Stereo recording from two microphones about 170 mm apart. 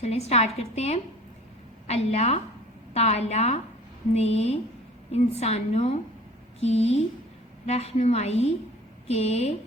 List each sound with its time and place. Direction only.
0.0 s a woman's voice: 40° left (ahead or behind)